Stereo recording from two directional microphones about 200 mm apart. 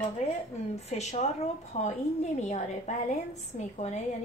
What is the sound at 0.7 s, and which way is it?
A woman's voice, 35° left (ahead or behind).